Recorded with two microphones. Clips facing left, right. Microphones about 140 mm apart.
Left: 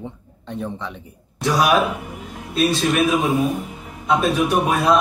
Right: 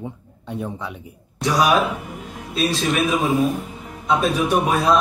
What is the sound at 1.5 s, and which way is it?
Speech, 15° left (ahead or behind).